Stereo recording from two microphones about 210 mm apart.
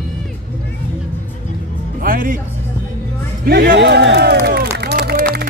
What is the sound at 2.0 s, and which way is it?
Music, 40° right (ahead or behind).